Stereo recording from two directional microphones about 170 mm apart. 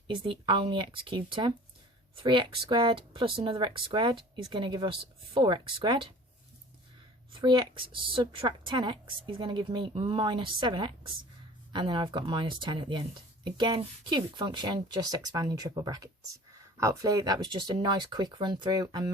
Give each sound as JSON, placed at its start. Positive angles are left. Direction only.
{"t": 0.1, "sound": "speech", "side_deg": -30}
{"t": 7.4, "sound": "speech", "side_deg": -30}